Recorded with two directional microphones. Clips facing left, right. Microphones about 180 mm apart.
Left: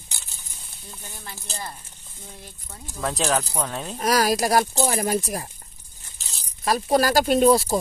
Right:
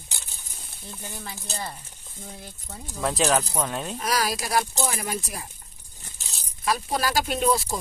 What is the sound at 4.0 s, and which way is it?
Speech, 45° left (ahead or behind).